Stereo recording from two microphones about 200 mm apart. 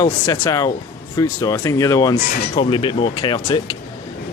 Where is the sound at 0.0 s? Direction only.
20° left (ahead or behind).